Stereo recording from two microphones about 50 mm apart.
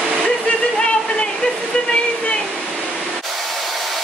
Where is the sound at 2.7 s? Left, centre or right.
Centre.